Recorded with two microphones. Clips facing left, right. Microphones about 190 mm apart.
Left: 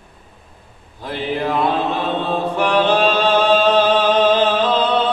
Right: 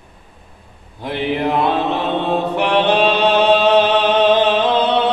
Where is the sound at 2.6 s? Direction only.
20° right (ahead or behind).